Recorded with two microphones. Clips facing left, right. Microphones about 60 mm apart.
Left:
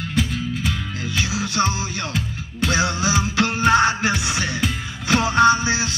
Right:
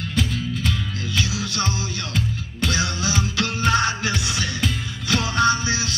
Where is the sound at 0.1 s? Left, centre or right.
Centre.